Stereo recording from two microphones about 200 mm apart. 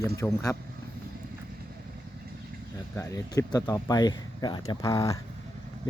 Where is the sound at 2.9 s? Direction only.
15° left (ahead or behind).